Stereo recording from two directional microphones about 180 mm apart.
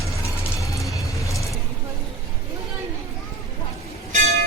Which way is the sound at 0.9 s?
15° left (ahead or behind).